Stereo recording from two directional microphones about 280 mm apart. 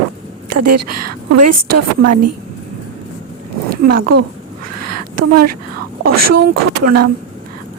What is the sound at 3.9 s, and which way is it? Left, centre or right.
Speech, right.